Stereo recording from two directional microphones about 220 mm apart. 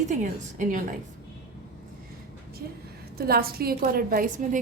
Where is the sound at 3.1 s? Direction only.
45° right (ahead or behind).